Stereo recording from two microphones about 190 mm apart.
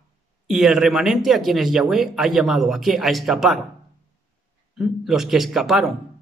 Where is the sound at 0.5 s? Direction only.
Centre (ahead or behind).